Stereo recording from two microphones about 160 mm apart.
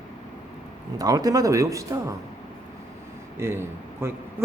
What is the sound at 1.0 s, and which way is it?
Speech, 25° right (ahead or behind).